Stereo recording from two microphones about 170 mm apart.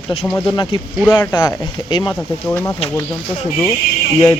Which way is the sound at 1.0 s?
10° left (ahead or behind).